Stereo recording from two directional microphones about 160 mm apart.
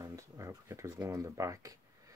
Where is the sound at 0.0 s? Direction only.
20° right (ahead or behind).